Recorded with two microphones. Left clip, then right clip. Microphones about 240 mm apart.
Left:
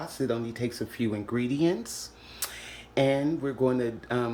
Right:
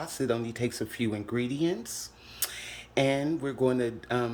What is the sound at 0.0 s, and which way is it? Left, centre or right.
Speech, centre.